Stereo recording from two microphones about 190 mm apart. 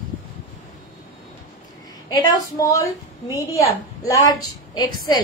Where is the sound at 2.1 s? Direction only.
20° left (ahead or behind).